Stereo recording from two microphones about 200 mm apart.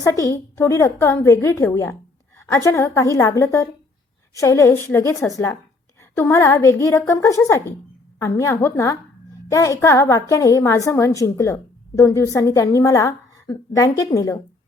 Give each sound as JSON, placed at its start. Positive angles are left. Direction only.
{"t": 0.0, "sound": "a woman's voice", "side_deg": 15}
{"t": 6.0, "sound": "a sound", "side_deg": 15}
{"t": 7.1, "sound": "a woman's voice", "side_deg": 15}